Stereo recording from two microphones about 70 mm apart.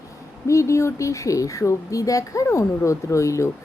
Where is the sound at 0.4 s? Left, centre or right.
Left.